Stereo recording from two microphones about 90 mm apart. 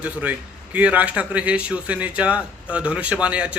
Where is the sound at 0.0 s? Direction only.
15° right (ahead or behind).